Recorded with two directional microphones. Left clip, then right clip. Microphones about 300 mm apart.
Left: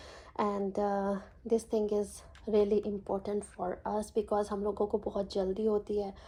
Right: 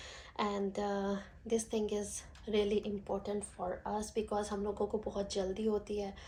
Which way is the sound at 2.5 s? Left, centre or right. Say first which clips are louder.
Left 5 dB; left.